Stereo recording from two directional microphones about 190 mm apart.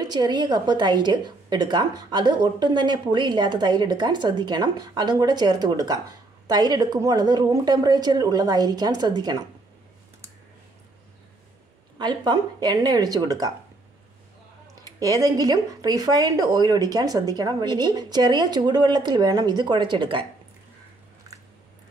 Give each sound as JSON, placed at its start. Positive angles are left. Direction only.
{"t": 0.0, "sound": "a woman's voice", "side_deg": -20}
{"t": 12.0, "sound": "a woman's voice", "side_deg": -20}
{"t": 15.0, "sound": "a woman's voice", "side_deg": -20}